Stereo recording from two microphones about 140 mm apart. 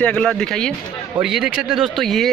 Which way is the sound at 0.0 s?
5° left (ahead or behind).